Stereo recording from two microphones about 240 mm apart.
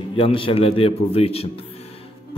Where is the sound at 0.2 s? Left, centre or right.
Left.